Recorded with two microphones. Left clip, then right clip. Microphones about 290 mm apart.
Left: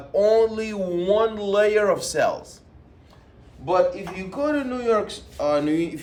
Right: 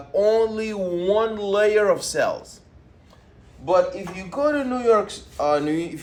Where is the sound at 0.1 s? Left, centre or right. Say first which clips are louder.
Left 1 dB; centre.